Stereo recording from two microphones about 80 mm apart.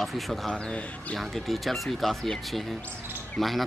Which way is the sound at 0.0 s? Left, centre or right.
Centre.